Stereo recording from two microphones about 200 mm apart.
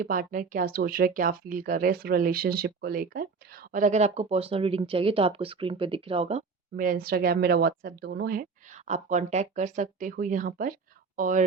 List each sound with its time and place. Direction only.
0.0 s speech: 45° right (ahead or behind)
6.7 s speech: 45° right (ahead or behind)